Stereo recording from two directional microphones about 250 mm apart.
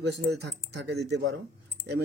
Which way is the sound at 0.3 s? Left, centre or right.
Right.